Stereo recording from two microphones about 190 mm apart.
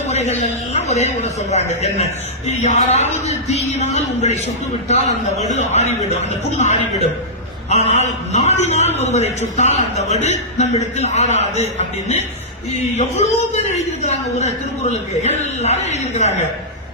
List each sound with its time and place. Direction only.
0.1 s speech: 35° left (ahead or behind)